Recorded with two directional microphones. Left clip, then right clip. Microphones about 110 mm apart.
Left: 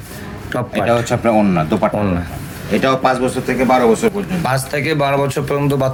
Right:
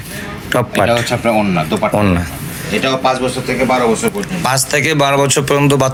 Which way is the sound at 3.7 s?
20° left (ahead or behind).